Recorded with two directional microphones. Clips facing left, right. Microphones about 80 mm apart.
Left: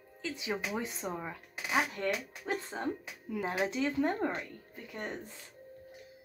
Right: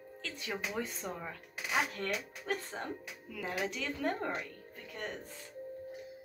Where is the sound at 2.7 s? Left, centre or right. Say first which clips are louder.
Left 4 dB; left.